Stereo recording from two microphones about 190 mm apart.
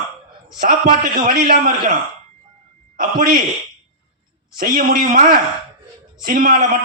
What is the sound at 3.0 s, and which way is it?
Speech, 50° right (ahead or behind).